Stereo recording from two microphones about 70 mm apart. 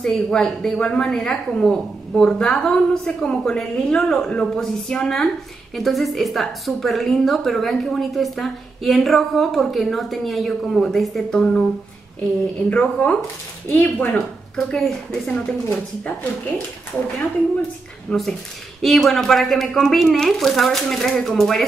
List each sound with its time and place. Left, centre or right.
0.0 s a woman's voice: centre
12.6 s speech: centre
14.7 s a woman's voice: centre
18.1 s a woman's voice: centre
18.8 s a woman's voice: centre